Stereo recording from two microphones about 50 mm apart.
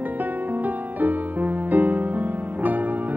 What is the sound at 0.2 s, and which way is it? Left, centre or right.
Music, right.